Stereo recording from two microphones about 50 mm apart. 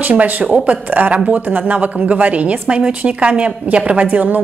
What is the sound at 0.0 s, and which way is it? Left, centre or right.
A woman's voice, right.